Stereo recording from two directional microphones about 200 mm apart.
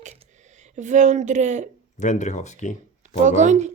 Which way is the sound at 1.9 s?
35° left (ahead or behind).